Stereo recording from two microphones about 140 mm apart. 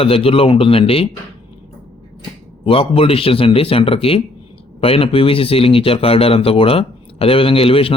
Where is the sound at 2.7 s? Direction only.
40° left (ahead or behind).